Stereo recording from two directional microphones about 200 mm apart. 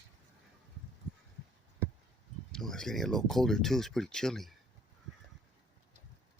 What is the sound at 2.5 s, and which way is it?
Speech, centre (ahead or behind).